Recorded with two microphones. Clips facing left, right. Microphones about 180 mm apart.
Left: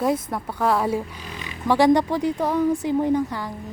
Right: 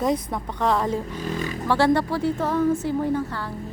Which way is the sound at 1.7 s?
15° left (ahead or behind).